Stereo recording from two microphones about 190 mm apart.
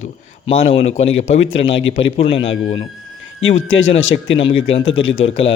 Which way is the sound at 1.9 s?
30° left (ahead or behind).